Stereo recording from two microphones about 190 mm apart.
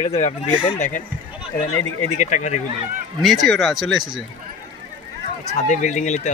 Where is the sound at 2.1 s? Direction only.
40° left (ahead or behind).